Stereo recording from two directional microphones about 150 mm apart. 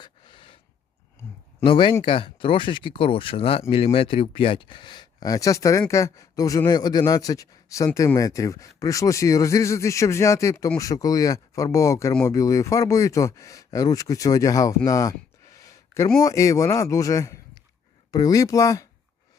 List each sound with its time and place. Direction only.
0.0 s gasp: 30° left (ahead or behind)
1.6 s speech: 35° left (ahead or behind)
14.8 s a sound: 20° left (ahead or behind)
16.2 s speech: 20° left (ahead or behind)